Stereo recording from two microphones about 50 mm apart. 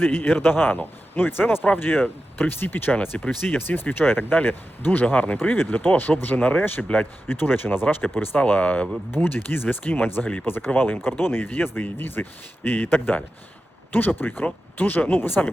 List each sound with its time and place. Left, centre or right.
0.0 s speech: left
7.3 s speech: left
8.4 s speech: left
9.1 s speech: left